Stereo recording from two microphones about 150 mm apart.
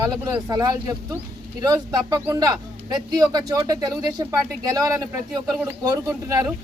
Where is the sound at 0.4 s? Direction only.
25° right (ahead or behind).